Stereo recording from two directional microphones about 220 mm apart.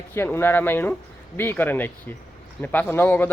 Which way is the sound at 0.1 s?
10° left (ahead or behind).